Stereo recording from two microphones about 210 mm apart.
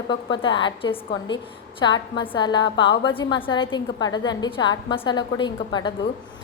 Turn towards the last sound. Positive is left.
turn(degrees=20)  # may be behind; listen again after turning